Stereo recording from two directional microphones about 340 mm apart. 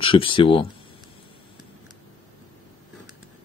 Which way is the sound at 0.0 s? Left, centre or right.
Centre.